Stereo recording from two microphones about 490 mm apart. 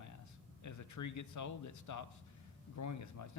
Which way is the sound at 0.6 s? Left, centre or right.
Left.